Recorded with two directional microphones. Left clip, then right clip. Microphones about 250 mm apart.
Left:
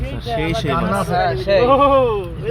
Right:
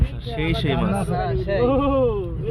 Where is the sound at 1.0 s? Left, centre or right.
Left.